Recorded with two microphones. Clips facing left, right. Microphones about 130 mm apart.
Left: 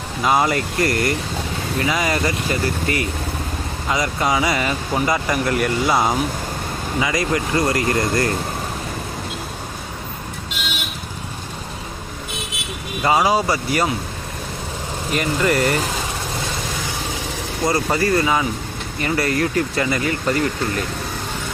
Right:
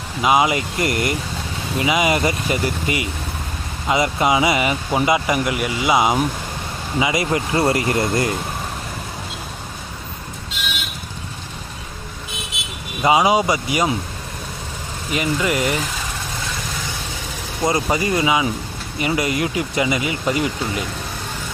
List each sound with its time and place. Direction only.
0.2 s speech: 10° right (ahead or behind)
0.8 s speech: 20° right (ahead or behind)
7.0 s speech: 20° right (ahead or behind)
13.0 s speech: 15° right (ahead or behind)
15.1 s speech: 5° right (ahead or behind)
17.6 s speech: 20° right (ahead or behind)